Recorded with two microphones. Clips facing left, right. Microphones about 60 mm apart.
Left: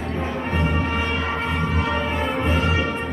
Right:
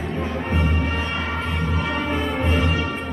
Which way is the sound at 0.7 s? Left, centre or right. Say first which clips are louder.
Left 2 dB; centre.